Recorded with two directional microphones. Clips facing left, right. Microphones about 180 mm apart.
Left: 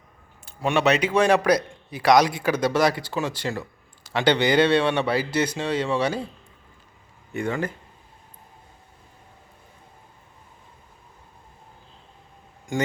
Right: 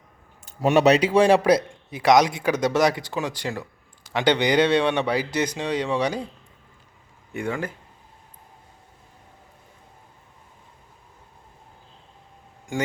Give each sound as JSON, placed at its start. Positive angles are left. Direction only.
{"t": 0.4, "sound": "speech", "side_deg": -40}
{"t": 7.3, "sound": "speech", "side_deg": -10}